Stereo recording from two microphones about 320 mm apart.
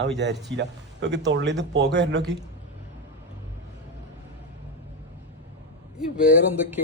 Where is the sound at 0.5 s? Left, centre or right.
Right.